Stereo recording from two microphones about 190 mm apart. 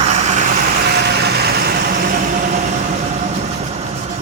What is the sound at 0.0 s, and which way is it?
Vehicle, 35° right (ahead or behind).